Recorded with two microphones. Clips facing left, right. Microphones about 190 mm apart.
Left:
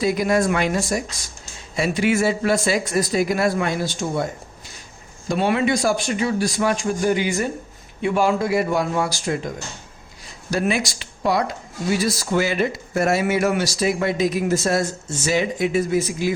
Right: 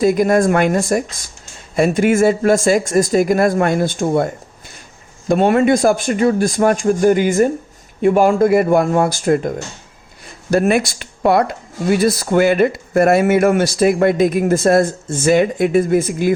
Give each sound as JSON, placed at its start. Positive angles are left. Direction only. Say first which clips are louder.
{"t": 0.0, "sound": "a man's voice", "louder": "right 6 dB", "side_deg": -50}
{"t": 5.3, "sound": "a man's voice", "louder": "right 7 dB", "side_deg": -50}